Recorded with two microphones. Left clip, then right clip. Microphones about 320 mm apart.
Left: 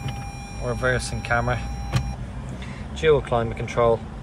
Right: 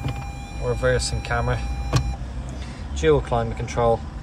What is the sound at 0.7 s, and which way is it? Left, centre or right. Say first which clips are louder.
Speech: right 2 dB; centre.